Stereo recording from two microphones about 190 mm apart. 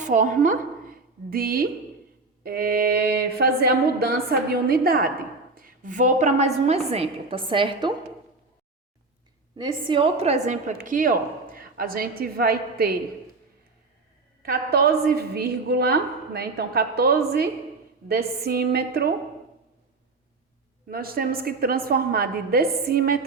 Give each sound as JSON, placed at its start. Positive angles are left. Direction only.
{"t": 0.0, "sound": "a woman's voice", "side_deg": -45}
{"t": 9.6, "sound": "a woman's voice", "side_deg": -25}
{"t": 14.4, "sound": "a woman's voice", "side_deg": -55}
{"t": 20.8, "sound": "a woman's voice", "side_deg": -50}